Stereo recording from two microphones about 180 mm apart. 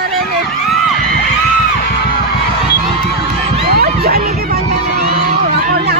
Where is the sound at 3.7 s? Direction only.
60° right (ahead or behind).